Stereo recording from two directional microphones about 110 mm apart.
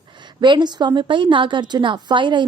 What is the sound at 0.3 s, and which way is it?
A woman's voice, 45° right (ahead or behind).